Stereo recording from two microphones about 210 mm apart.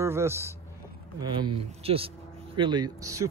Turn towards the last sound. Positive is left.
turn(degrees=-15)  # may be behind; listen again after turning